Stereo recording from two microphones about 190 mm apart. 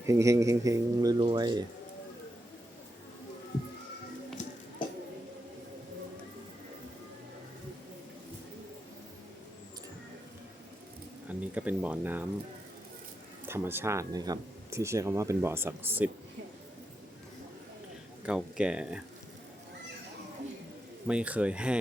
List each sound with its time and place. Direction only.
0.0 s speech: 15° right (ahead or behind)
4.4 s music: 40° left (ahead or behind)
11.3 s speech: 10° right (ahead or behind)
13.5 s speech: 10° right (ahead or behind)
18.3 s speech: 5° right (ahead or behind)
21.1 s speech: 5° right (ahead or behind)